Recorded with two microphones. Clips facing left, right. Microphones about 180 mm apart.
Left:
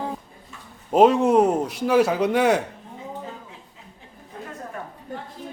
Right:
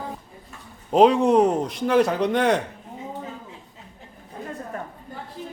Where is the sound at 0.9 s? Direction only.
5° left (ahead or behind).